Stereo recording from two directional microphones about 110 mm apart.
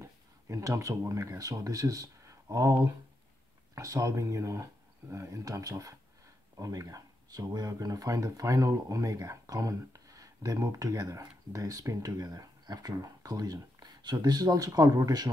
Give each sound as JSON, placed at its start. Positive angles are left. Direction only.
{"t": 0.0, "sound": "speech", "side_deg": -30}